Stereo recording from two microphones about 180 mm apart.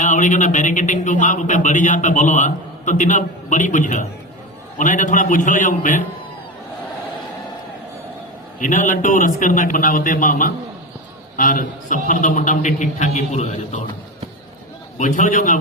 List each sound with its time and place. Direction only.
0.0 s a man's voice: 45° left (ahead or behind)
8.5 s a man's voice: 45° left (ahead or behind)
14.9 s a man's voice: 45° left (ahead or behind)